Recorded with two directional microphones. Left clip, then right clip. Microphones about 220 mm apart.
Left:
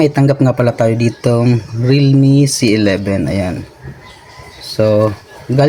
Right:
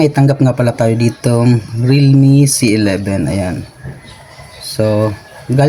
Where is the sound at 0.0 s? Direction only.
10° left (ahead or behind).